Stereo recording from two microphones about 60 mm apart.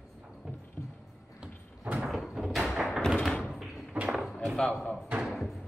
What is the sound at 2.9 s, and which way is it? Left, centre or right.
Thump, centre.